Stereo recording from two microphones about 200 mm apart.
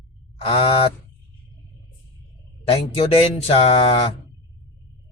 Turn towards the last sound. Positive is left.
turn(degrees=30)  # may be behind; listen again after turning